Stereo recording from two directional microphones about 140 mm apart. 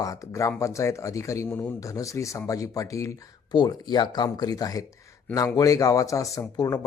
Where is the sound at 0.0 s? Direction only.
25° left (ahead or behind).